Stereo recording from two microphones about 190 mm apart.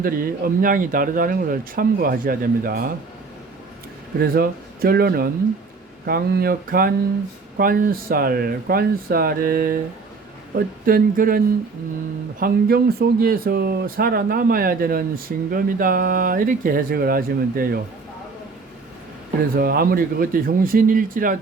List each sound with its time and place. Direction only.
0.0 s speech: 50° right (ahead or behind)
4.2 s speech: 50° right (ahead or behind)
10.8 s speech: 50° right (ahead or behind)
19.5 s speech: 50° right (ahead or behind)